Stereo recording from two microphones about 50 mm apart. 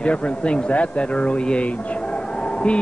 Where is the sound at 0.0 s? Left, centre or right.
Left.